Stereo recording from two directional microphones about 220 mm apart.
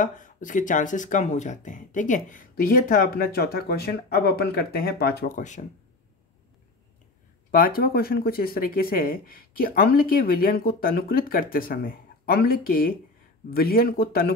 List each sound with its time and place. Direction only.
0.0 s speech: 35° left (ahead or behind)
7.5 s speech: 40° left (ahead or behind)